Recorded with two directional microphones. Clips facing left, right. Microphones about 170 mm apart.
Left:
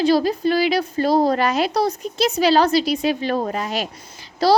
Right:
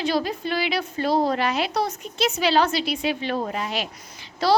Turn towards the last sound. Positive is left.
turn(degrees=35)  # may be behind; listen again after turning